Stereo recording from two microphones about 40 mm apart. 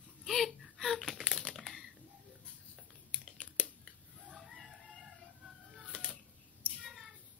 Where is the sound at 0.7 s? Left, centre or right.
Centre.